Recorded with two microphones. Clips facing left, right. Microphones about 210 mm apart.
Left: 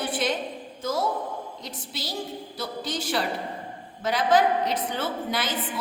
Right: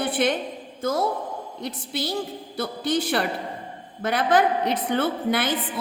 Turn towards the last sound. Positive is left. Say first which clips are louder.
# right 5 dB
turn(degrees=-60)  # may be behind; listen again after turning